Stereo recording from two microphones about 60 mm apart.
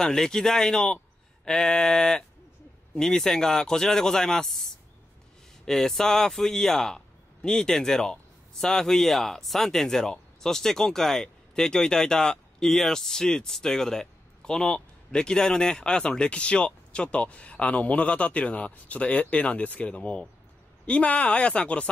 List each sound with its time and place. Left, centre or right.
0.0 s speech: centre
5.7 s speech: centre